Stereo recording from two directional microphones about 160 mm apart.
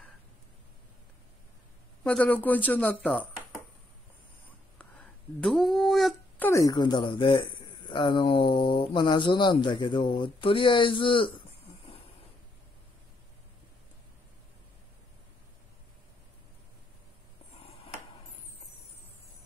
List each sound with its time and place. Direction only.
2.0 s speech: 10° left (ahead or behind)
4.7 s a sound: 5° left (ahead or behind)
6.4 s speech: 20° left (ahead or behind)